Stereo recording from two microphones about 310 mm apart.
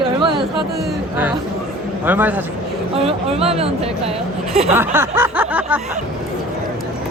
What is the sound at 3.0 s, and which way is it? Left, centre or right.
Speech, centre.